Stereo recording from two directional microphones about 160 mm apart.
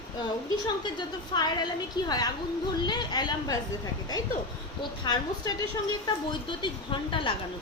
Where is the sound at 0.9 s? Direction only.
25° left (ahead or behind).